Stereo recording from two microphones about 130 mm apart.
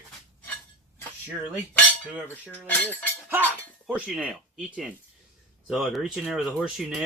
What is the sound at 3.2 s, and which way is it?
Speech, 15° right (ahead or behind).